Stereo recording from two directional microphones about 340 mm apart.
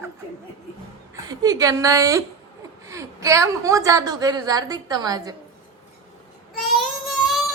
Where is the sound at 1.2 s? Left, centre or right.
Centre.